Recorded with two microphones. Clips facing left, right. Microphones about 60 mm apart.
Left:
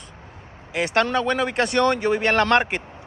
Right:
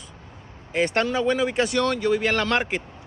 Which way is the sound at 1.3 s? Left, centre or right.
Centre.